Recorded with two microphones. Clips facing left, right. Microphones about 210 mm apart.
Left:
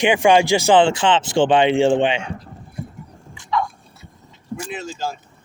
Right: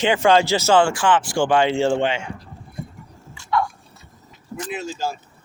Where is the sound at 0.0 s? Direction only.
15° left (ahead or behind).